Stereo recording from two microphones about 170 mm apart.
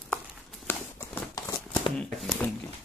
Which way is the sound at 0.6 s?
10° left (ahead or behind).